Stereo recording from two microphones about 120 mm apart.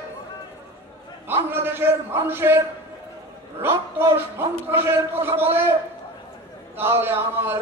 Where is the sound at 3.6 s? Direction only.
20° right (ahead or behind).